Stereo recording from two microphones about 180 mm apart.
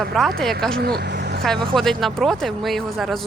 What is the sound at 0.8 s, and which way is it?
Speech, 60° right (ahead or behind).